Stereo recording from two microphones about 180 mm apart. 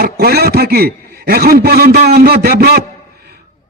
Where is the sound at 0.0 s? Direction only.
60° right (ahead or behind).